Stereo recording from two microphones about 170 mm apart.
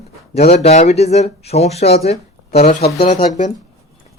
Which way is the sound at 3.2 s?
45° left (ahead or behind).